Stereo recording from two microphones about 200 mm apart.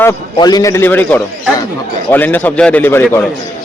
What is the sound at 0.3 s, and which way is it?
A man's voice, 20° left (ahead or behind).